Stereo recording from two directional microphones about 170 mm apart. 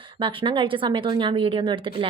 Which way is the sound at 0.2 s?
30° right (ahead or behind).